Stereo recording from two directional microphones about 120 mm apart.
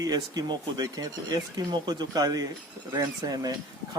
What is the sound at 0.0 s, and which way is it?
Speech, 35° right (ahead or behind).